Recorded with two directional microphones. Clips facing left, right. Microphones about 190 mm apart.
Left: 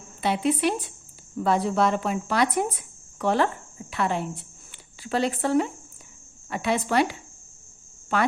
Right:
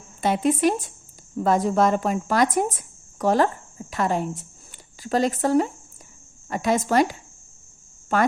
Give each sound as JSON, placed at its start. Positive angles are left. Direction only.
{"t": 0.2, "sound": "speech", "side_deg": -45}